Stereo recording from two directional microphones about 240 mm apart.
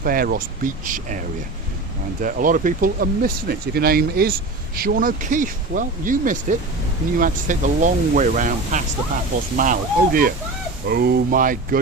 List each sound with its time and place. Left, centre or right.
0.0 s speech: right
2.2 s speech: right